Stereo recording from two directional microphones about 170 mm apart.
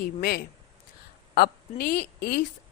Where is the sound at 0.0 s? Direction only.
60° left (ahead or behind).